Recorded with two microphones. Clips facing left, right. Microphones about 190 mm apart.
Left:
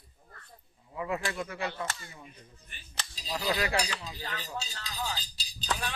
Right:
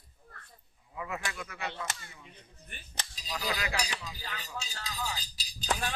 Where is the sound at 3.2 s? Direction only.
25° left (ahead or behind).